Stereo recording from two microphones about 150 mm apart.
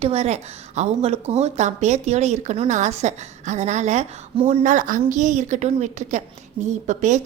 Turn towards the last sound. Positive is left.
turn(degrees=-55)  # may be behind; listen again after turning